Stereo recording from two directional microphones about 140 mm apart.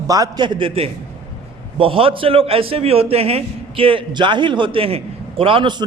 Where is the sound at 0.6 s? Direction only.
40° right (ahead or behind).